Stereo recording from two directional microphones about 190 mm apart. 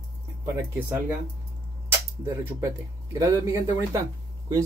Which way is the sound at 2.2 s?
15° right (ahead or behind).